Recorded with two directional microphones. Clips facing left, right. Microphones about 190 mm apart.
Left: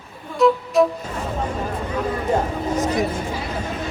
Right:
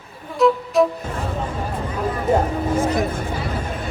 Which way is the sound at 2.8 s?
55° right (ahead or behind).